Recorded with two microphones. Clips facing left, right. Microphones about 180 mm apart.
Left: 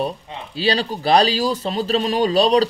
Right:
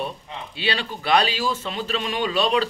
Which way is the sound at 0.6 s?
35° left (ahead or behind).